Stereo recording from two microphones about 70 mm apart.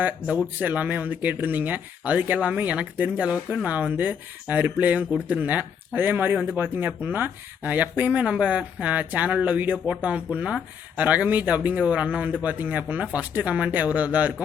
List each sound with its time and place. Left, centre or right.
0.0 s speech: right